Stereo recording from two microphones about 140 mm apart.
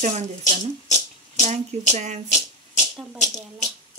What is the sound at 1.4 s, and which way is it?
Speech, 50° right (ahead or behind).